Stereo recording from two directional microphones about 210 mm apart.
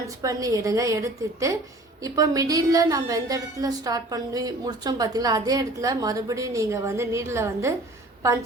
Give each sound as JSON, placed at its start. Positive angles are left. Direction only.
{"t": 0.2, "sound": "a woman's voice", "side_deg": -15}